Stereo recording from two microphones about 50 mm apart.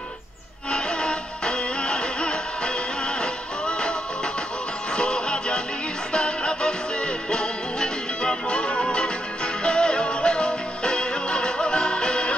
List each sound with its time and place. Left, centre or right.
0.7 s music: centre